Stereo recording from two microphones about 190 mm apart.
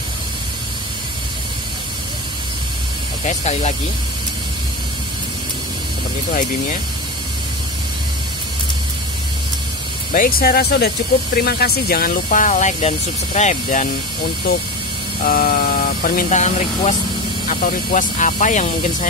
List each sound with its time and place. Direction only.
3.3 s speech: 40° left (ahead or behind)
10.1 s speech: 50° left (ahead or behind)
15.2 s speech: 50° left (ahead or behind)